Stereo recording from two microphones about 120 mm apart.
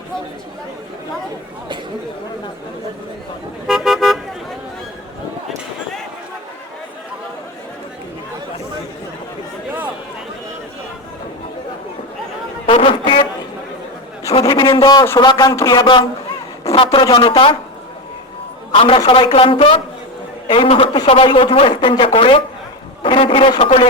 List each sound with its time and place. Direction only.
3.7 s car: centre (ahead or behind)
12.6 s a sound: 50° left (ahead or behind)
14.4 s a sound: 40° left (ahead or behind)
15.2 s a man's voice: 35° left (ahead or behind)
15.8 s a man's voice: 45° left (ahead or behind)
18.7 s a man's voice: 50° left (ahead or behind)